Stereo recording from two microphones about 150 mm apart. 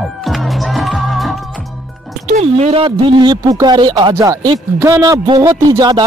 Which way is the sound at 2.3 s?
50° right (ahead or behind).